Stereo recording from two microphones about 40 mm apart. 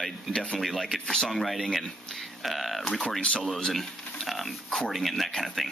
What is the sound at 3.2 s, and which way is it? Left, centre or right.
Speech, left.